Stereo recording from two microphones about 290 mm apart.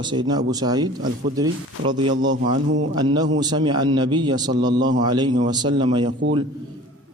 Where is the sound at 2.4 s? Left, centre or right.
Right.